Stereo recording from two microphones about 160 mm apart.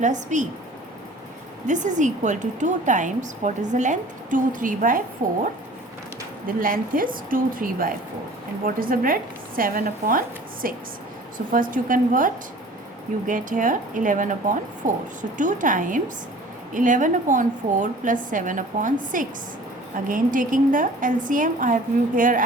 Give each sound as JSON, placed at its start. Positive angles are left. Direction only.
{"t": 0.0, "sound": "a woman's voice", "side_deg": -50}
{"t": 1.6, "sound": "a woman's voice", "side_deg": -50}
{"t": 6.6, "sound": "speech", "side_deg": -60}